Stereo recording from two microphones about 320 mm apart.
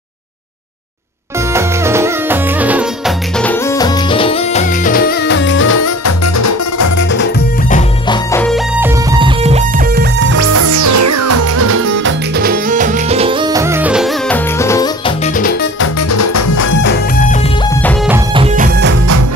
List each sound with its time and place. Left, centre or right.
1.5 s music: centre
3.3 s music: centre; by 7.1 s left
7.1 s music: left
7.7 s music: centre
8.8 s music: centre
10.3 s music: right; by 15.1 s centre
15.3 s music: left
16.1 s music: left
16.8 s music: left
17.8 s music: centre
18.3 s music: centre